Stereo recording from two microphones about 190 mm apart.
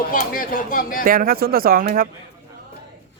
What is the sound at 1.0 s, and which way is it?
Speech, 50° right (ahead or behind).